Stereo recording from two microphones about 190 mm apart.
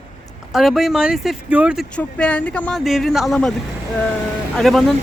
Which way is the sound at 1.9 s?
5° left (ahead or behind).